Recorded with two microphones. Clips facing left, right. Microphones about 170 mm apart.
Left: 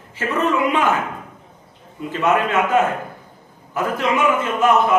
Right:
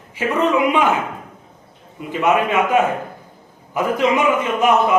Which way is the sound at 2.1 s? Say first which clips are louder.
Right 1 dB; 15° right (ahead or behind).